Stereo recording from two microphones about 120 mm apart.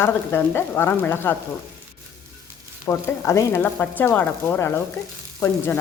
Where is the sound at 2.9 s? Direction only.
25° left (ahead or behind).